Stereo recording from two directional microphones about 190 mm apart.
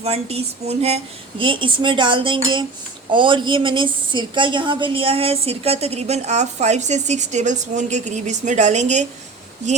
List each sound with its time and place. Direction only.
0.0 s a woman's voice: 30° right (ahead or behind)